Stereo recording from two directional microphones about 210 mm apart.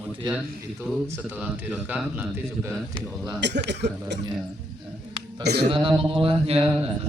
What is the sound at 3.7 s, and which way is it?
Speech, 55° right (ahead or behind).